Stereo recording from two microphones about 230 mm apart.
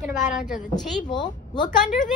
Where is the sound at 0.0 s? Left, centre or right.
Left.